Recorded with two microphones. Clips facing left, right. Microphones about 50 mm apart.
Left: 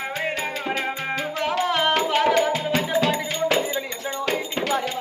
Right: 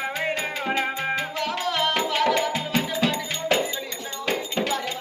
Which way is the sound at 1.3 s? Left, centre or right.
Left.